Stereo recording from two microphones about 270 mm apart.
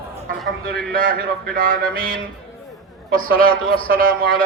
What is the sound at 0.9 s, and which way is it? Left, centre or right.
A man's voice, right.